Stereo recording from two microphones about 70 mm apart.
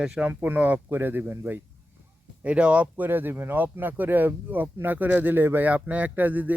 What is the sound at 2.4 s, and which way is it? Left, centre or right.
Speech, centre.